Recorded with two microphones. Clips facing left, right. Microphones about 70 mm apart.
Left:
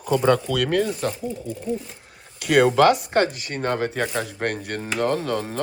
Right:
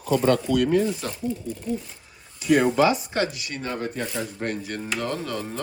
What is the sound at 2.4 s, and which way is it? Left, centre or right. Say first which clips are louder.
A man's voice: left 3 dB; left.